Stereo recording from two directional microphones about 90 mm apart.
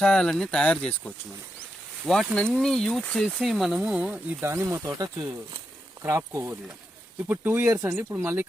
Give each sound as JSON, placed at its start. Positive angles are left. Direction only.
{"t": 0.0, "sound": "speech", "side_deg": 5}
{"t": 4.4, "sound": "speech", "side_deg": -30}
{"t": 7.3, "sound": "speech", "side_deg": -20}